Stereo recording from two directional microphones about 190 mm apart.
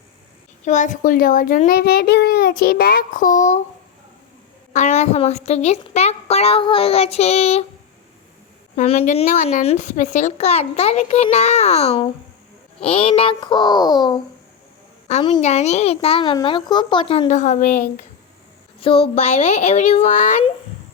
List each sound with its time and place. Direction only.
0.6 s a child's voice: 40° left (ahead or behind)
4.7 s a woman's voice: 40° left (ahead or behind)
8.7 s a woman's voice: 35° left (ahead or behind)
15.4 s a woman's voice: 35° left (ahead or behind)
18.8 s a woman's voice: 30° left (ahead or behind)